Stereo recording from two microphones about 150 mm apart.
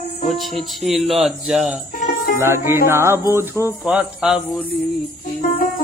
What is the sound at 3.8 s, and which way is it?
Speech, 5° right (ahead or behind).